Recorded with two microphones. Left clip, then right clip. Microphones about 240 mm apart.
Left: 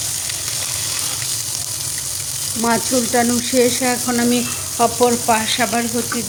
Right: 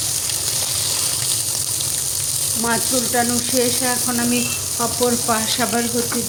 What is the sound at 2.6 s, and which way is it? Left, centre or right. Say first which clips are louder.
Frying: left 4 dB; centre.